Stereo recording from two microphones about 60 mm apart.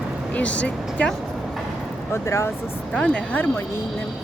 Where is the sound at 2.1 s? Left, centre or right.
Left.